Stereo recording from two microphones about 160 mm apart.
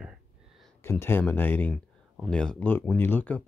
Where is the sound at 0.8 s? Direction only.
15° left (ahead or behind).